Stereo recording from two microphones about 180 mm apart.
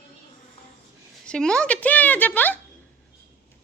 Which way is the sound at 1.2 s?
5° left (ahead or behind).